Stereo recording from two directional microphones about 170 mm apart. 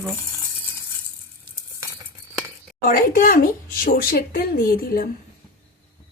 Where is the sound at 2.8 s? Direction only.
55° left (ahead or behind).